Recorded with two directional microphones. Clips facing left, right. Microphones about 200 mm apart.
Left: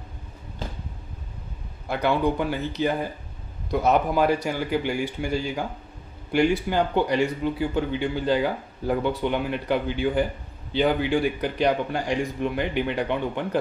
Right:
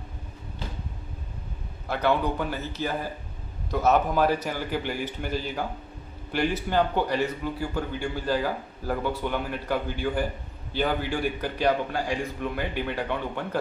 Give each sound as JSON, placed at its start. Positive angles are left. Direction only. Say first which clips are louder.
{"t": 1.9, "sound": "a man's voice", "louder": "left 2 dB", "side_deg": 10}